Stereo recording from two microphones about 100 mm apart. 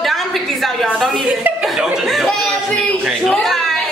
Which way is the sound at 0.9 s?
Centre (ahead or behind).